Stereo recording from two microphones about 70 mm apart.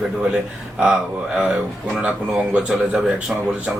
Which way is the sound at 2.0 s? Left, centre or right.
Centre.